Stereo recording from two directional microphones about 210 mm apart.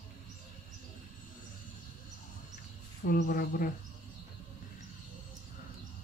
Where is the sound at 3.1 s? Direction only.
45° left (ahead or behind).